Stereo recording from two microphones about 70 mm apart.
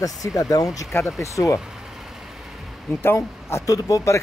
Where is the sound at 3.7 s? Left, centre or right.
Left.